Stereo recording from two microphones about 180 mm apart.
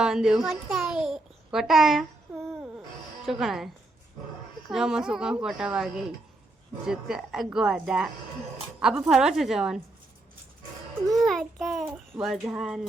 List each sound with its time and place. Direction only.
0.0 s a child's voice: 5° right (ahead or behind)
3.2 s a child's voice: centre (ahead or behind)
4.7 s a child's voice: 5° right (ahead or behind)
11.1 s a child's voice: centre (ahead or behind)